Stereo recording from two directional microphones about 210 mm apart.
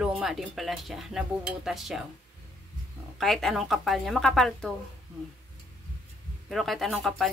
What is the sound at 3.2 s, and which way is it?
Speech, centre (ahead or behind).